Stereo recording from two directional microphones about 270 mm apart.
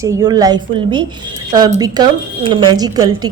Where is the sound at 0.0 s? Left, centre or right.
Centre.